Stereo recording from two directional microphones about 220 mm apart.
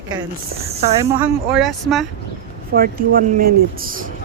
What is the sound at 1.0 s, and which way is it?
Speech, 5° right (ahead or behind).